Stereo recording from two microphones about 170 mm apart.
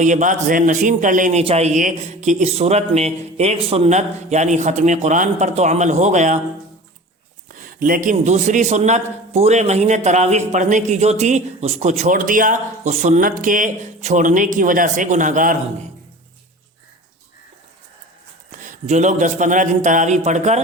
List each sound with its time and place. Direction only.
0.0 s a man's voice: 45° right (ahead or behind)
7.4 s a man's voice: 50° right (ahead or behind)
18.5 s a man's voice: 50° right (ahead or behind)